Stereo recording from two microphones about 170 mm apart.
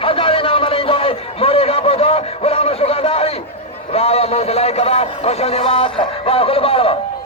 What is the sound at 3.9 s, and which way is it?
A man's voice, 35° left (ahead or behind).